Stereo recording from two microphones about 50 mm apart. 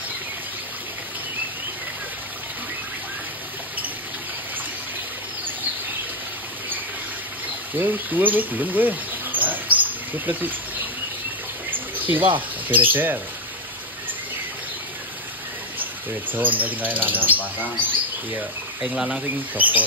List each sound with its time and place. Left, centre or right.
7.7 s speech: right
11.7 s speech: right
15.8 s speech: right
18.8 s speech: centre
19.5 s speech: right